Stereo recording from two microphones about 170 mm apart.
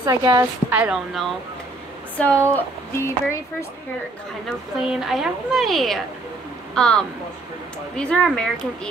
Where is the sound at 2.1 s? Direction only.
10° left (ahead or behind).